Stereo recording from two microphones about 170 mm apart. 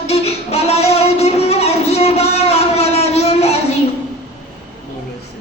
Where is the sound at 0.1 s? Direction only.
35° left (ahead or behind).